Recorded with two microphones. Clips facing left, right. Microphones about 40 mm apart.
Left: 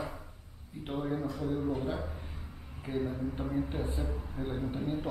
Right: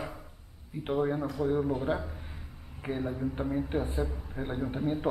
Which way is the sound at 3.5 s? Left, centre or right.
Centre.